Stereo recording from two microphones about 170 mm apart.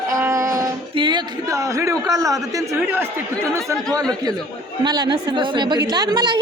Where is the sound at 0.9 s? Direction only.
25° right (ahead or behind).